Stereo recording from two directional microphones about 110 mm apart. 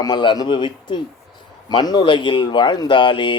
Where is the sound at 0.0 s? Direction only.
40° left (ahead or behind).